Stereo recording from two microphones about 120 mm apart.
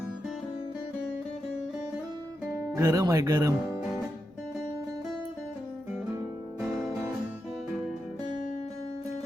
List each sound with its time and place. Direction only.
2.7 s speech: 25° right (ahead or behind)